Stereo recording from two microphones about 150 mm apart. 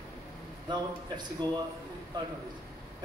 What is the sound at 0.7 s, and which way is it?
Speech, 30° right (ahead or behind).